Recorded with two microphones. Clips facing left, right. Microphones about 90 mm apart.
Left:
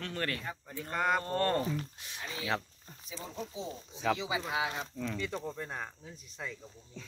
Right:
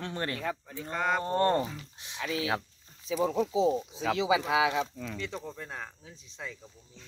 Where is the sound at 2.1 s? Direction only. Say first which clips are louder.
Right 5 dB; 90° right.